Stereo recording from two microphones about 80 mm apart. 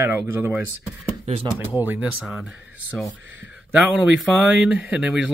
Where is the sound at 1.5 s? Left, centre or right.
Right.